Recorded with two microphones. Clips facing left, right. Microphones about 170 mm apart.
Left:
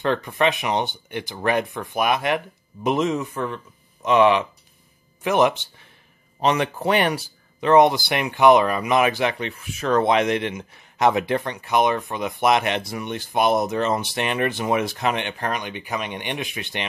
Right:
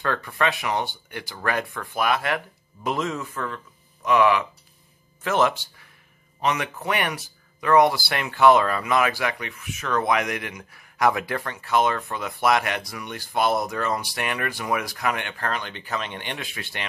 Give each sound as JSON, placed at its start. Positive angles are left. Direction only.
{"t": 0.0, "sound": "speech", "side_deg": 20}